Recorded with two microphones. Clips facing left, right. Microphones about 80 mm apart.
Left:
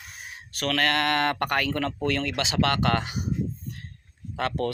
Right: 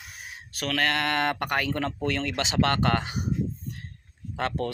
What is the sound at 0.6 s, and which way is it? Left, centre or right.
Speech, centre.